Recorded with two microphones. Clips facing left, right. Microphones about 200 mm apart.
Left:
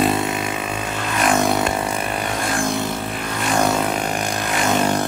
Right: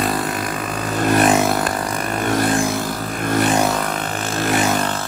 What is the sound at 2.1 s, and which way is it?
Vehicle, 45° right (ahead or behind).